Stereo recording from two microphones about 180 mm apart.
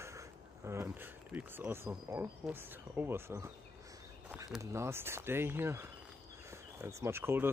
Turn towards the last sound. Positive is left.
turn(degrees=-10)  # may be behind; listen again after turning